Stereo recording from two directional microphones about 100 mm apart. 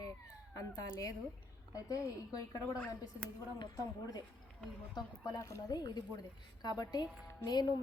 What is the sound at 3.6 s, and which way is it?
A woman's voice, 40° left (ahead or behind).